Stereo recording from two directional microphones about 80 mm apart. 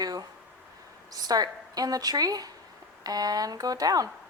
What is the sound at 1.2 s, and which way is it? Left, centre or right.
A woman's voice, right.